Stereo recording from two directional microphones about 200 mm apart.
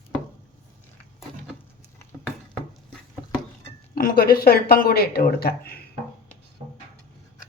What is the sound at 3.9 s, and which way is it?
Speech, 45° left (ahead or behind).